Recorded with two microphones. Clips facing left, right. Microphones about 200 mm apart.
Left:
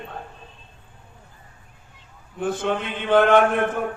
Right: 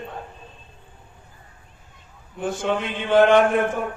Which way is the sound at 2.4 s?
55° left (ahead or behind).